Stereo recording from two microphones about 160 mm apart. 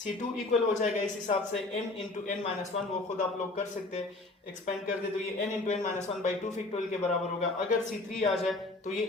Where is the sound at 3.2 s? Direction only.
50° left (ahead or behind).